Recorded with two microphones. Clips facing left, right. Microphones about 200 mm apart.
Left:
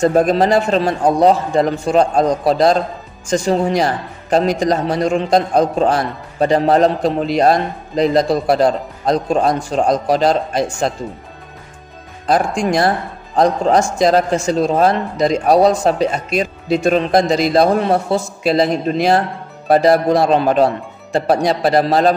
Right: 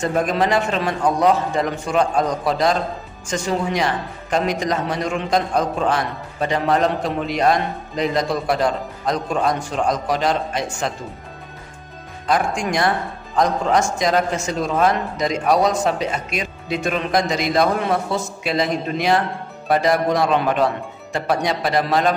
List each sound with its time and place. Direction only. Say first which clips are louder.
0.0 s a man's voice: left 7 dB; 35° left (ahead or behind)
12.3 s a man's voice: left 5 dB; 35° left (ahead or behind)